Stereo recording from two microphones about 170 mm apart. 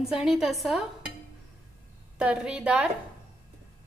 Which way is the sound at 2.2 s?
5° right (ahead or behind).